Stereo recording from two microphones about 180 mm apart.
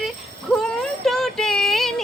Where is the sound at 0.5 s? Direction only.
Centre (ahead or behind).